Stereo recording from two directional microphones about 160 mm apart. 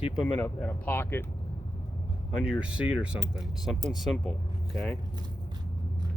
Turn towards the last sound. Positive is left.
turn(degrees=-25)  # may be behind; listen again after turning